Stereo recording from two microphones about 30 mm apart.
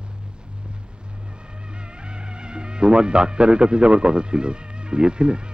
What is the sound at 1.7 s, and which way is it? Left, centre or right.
Music, right.